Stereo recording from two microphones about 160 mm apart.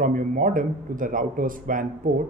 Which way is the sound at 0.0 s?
55° right (ahead or behind).